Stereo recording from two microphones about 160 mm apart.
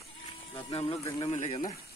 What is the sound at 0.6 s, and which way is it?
Speech, 35° left (ahead or behind).